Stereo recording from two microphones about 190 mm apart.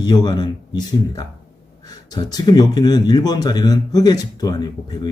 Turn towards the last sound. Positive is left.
turn(degrees=20)  # may be behind; listen again after turning